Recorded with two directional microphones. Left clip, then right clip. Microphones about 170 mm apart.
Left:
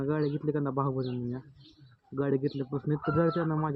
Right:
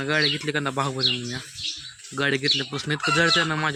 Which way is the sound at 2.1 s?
30° right (ahead or behind).